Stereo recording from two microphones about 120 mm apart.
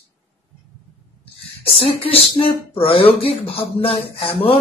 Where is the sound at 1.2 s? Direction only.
50° left (ahead or behind).